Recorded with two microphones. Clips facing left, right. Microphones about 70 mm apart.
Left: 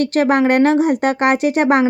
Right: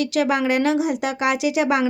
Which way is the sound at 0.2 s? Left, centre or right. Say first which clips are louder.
Left 6 dB; left.